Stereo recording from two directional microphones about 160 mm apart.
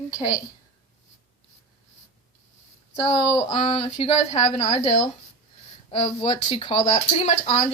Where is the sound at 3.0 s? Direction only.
30° left (ahead or behind).